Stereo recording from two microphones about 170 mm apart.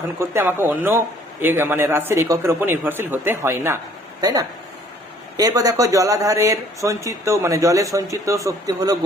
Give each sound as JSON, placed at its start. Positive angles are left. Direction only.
{"t": 0.2, "sound": "a man's voice", "side_deg": -15}